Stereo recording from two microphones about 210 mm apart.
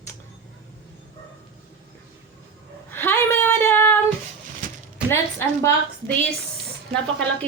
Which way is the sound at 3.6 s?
10° left (ahead or behind).